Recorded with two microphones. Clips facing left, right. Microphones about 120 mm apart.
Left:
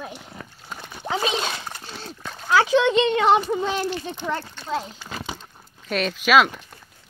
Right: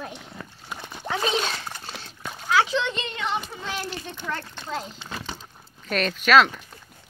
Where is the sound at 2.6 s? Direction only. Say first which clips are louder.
Left 7 dB; 55° left (ahead or behind).